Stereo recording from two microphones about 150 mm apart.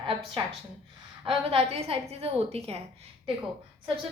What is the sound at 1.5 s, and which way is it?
A woman's voice, 40° right (ahead or behind).